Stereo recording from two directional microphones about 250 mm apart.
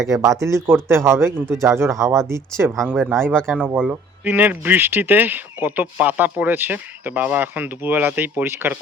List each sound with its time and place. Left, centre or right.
0.1 s speech: centre
2.7 s speech: centre
3.1 s speech: centre